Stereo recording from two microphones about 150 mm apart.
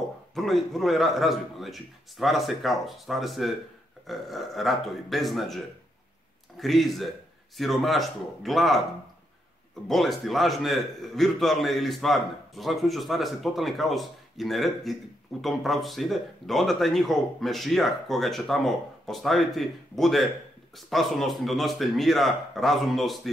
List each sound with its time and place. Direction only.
0.3 s a man's voice: centre (ahead or behind)
6.6 s a man's voice: centre (ahead or behind)
9.8 s a man's voice: centre (ahead or behind)